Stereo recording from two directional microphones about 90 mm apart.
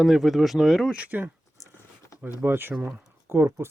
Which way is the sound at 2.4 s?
25° right (ahead or behind).